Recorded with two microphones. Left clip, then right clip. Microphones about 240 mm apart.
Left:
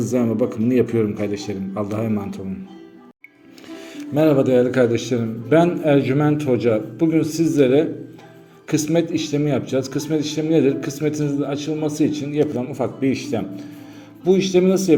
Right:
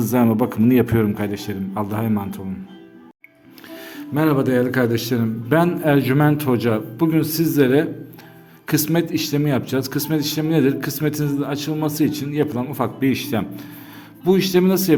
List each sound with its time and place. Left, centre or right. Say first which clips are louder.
0.0 s a man's voice: right 1 dB; right
4.1 s a man's voice: left 3 dB; centre